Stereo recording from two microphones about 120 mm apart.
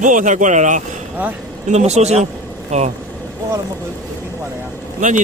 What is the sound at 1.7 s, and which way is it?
Speech, 65° right (ahead or behind).